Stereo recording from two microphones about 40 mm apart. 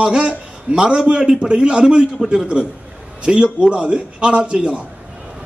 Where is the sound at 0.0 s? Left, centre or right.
Right.